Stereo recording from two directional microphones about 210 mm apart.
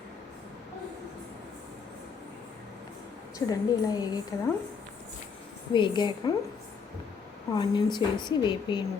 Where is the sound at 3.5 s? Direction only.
20° left (ahead or behind).